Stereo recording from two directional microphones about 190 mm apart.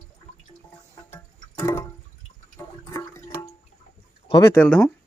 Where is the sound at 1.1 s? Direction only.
15° left (ahead or behind).